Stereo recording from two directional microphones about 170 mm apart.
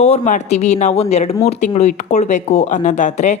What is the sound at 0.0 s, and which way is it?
A woman's voice, 40° left (ahead or behind).